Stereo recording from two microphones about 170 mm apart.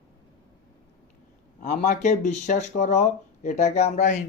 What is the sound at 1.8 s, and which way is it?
Speech, 45° left (ahead or behind).